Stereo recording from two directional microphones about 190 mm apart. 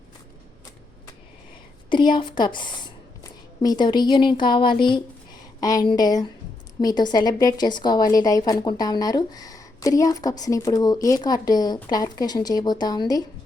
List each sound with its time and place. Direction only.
1.9 s a woman's voice: 25° left (ahead or behind)